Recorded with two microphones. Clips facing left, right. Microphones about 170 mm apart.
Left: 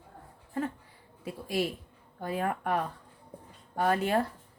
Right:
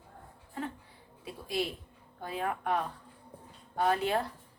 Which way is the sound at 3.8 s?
50° left (ahead or behind).